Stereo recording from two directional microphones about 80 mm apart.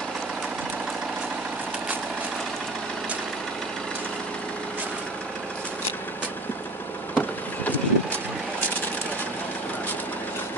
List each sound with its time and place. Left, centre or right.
7.2 s vehicle: centre